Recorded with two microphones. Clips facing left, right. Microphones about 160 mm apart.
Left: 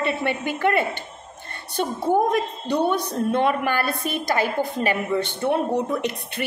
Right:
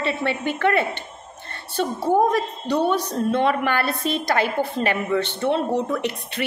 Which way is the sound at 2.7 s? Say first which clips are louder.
Right 1 dB; 15° left (ahead or behind).